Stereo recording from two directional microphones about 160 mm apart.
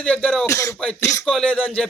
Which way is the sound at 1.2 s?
5° left (ahead or behind).